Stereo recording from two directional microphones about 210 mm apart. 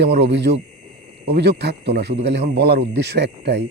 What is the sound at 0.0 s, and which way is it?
Speech, 55° right (ahead or behind).